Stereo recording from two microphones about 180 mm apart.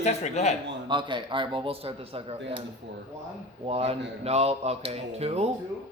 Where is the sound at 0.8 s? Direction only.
25° right (ahead or behind).